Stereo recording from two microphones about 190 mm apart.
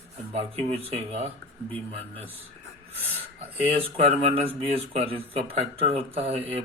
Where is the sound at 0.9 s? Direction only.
30° right (ahead or behind).